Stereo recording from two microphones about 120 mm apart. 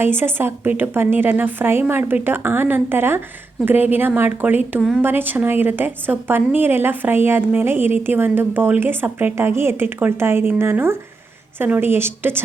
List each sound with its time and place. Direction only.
0.0 s a woman's voice: 20° right (ahead or behind)